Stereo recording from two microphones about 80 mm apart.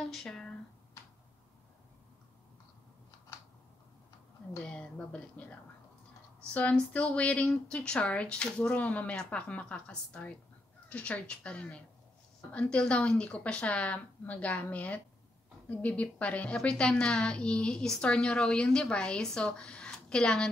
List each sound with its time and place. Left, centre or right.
0.0 s speech: centre
4.6 s a woman's voice: centre